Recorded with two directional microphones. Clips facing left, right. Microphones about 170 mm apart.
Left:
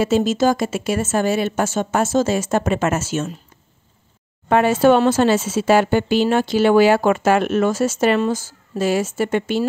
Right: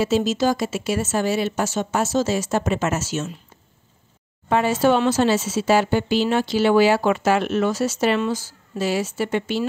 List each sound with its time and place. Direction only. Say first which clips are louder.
0.0 s speech: left 3 dB; 50° left (ahead or behind)
4.5 s speech: left 4 dB; 60° left (ahead or behind)